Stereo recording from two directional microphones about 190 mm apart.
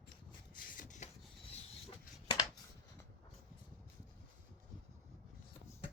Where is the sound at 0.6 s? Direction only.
45° left (ahead or behind).